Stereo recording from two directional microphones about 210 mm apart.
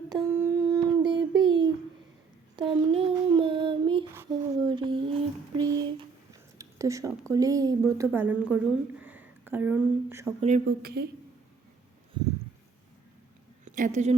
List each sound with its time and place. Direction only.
0.1 s child singing: 10° right (ahead or behind)
4.1 s a sound: 15° right (ahead or behind)
6.6 s a woman's voice: 15° right (ahead or behind)
10.7 s a woman's voice: 50° right (ahead or behind)
13.7 s a woman's voice: 35° right (ahead or behind)